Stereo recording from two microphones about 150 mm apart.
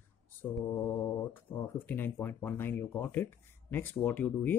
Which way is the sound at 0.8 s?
15° left (ahead or behind).